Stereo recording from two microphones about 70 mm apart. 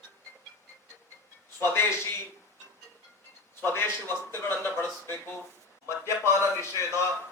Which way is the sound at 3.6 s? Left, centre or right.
Left.